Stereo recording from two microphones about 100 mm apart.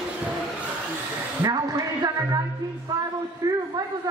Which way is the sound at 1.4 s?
35° right (ahead or behind).